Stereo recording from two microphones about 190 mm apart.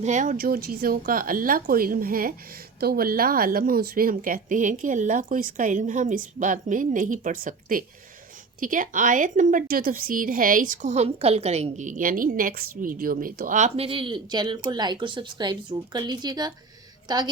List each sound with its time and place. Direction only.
0.0 s a woman's voice: 40° right (ahead or behind); by 16.5 s 20° right (ahead or behind)